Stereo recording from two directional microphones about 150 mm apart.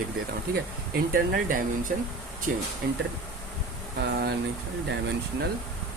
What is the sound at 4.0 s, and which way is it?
Speech, 90° right.